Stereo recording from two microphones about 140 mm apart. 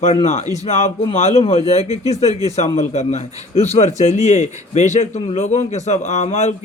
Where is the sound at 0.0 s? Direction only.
50° left (ahead or behind).